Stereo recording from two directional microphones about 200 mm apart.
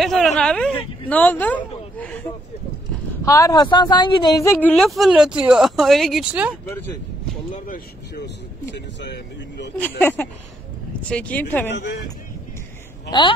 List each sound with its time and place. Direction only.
0.0 s speech: centre (ahead or behind)
2.0 s a sound: 10° left (ahead or behind)
3.3 s speech: 15° left (ahead or behind); by 6.5 s 5° right (ahead or behind)
7.5 s speech: 45° left (ahead or behind)
8.7 s speech: 60° left (ahead or behind)
9.8 s speech: 10° left (ahead or behind)
11.7 s speech: 60° left (ahead or behind)